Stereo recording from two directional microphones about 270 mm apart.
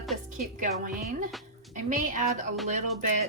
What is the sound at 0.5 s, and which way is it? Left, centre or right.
A woman's voice, right.